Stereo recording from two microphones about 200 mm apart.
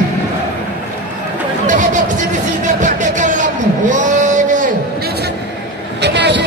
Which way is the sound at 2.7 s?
40° right (ahead or behind).